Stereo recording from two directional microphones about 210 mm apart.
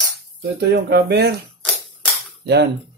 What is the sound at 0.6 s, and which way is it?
Speech, 55° right (ahead or behind).